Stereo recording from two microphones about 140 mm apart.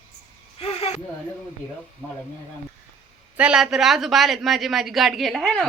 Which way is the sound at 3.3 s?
5° right (ahead or behind).